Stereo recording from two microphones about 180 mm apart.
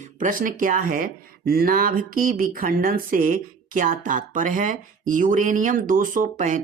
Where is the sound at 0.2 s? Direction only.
50° right (ahead or behind).